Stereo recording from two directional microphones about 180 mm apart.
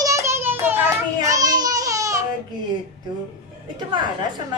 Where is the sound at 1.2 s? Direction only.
20° right (ahead or behind).